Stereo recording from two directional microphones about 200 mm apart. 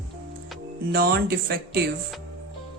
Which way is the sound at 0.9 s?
50° right (ahead or behind).